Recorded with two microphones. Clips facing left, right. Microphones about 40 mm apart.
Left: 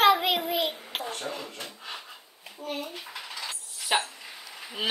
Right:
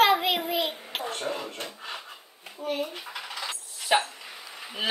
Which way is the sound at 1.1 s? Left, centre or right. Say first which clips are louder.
Right 3 dB; right.